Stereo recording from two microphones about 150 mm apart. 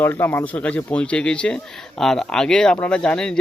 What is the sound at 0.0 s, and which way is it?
A man's voice, 15° left (ahead or behind).